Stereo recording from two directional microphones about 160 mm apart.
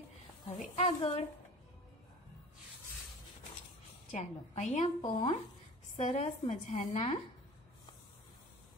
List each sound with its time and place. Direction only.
0.6 s speech: 40° left (ahead or behind)
4.1 s a woman's voice: 45° left (ahead or behind)
5.0 s speech: 25° left (ahead or behind)
5.9 s a woman's voice: 40° left (ahead or behind)